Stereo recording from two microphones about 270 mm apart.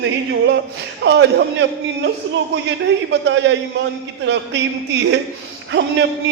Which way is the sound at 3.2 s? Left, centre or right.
Right.